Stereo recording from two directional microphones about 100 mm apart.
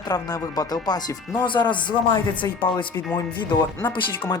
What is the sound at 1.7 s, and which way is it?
Speech, 50° left (ahead or behind).